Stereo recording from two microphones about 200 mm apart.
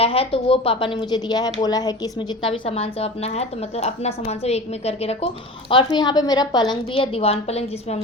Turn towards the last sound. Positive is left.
turn(degrees=30)  # may be behind; listen again after turning